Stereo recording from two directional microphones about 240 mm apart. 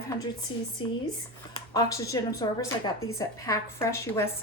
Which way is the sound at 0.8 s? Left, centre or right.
Centre.